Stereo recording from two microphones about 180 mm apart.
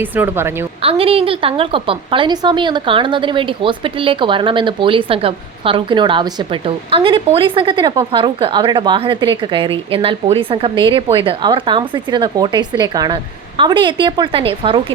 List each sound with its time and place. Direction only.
0.0 s a woman's voice: 10° right (ahead or behind)
0.8 s a woman's voice: 30° right (ahead or behind)